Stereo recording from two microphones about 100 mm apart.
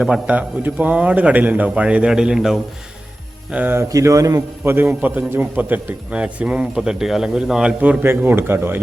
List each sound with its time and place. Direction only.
0.0 s a man's voice: 10° right (ahead or behind)
3.5 s a man's voice: 15° right (ahead or behind)
3.8 s a man's voice: 35° right (ahead or behind)
4.7 s a man's voice: 20° right (ahead or behind)